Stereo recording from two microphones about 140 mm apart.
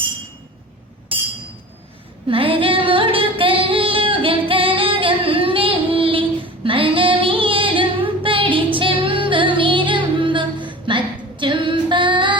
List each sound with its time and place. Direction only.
2.2 s singing: 40° right (ahead or behind)
6.7 s female singing: 40° right (ahead or behind)